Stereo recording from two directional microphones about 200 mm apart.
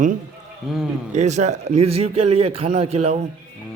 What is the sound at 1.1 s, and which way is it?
A man's voice, 35° right (ahead or behind).